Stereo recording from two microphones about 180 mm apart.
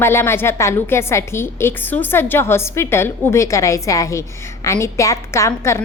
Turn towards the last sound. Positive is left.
turn(degrees=15)  # may be behind; listen again after turning